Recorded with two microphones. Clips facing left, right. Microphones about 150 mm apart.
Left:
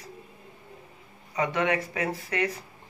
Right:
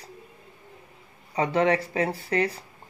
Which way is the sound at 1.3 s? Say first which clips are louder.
Right 4 dB; 30° right (ahead or behind).